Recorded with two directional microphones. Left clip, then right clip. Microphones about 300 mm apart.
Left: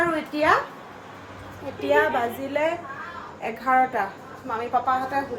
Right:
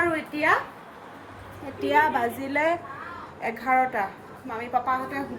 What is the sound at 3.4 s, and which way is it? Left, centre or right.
Speech, centre.